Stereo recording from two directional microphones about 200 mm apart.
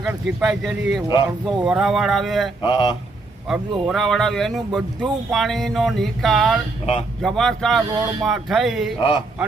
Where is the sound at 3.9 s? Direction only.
Centre (ahead or behind).